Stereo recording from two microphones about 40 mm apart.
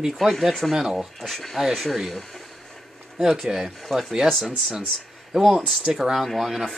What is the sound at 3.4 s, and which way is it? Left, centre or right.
Speech, centre.